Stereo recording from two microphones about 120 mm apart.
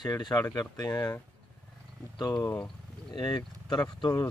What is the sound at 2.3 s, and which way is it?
Speech, 10° left (ahead or behind).